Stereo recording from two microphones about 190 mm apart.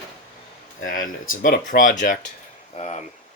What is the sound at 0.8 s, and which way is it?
Speech, 45° left (ahead or behind).